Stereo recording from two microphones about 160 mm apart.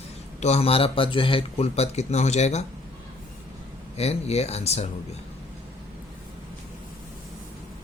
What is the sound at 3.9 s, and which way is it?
Speech, 40° left (ahead or behind).